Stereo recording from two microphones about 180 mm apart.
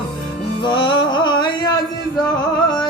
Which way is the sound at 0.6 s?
25° left (ahead or behind).